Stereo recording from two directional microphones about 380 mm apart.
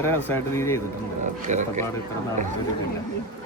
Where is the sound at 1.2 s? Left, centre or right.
Centre.